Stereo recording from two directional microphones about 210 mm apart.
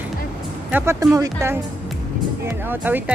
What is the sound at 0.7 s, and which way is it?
Speech, 15° right (ahead or behind).